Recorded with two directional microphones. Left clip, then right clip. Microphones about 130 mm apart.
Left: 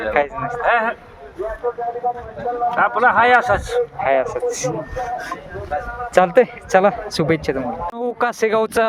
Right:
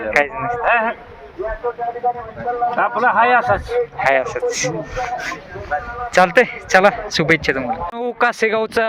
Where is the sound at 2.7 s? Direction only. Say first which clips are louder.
Left 1 dB; 40° left (ahead or behind).